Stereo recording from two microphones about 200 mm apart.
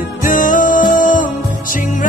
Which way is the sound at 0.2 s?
40° left (ahead or behind).